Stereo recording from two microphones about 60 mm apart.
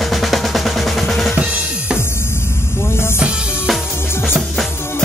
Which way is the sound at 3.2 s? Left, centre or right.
Centre.